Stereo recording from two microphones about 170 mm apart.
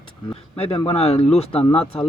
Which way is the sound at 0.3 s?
35° left (ahead or behind).